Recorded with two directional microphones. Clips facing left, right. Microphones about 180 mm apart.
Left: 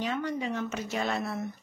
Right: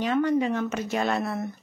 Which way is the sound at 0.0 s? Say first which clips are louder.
Right 8 dB; 55° right (ahead or behind).